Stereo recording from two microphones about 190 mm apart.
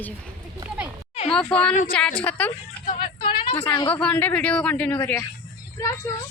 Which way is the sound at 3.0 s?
25° left (ahead or behind).